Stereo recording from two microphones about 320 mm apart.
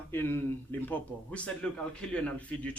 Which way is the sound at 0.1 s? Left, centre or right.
Centre.